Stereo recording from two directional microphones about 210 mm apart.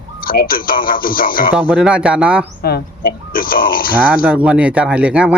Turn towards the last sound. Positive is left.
turn(degrees=-5)  # may be behind; listen again after turning